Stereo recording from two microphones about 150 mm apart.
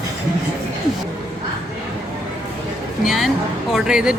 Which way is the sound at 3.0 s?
Centre (ahead or behind).